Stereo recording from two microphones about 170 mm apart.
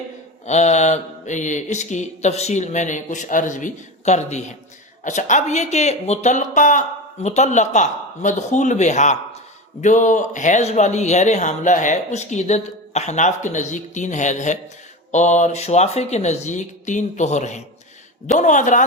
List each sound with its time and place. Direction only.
0.4 s speech: 40° left (ahead or behind)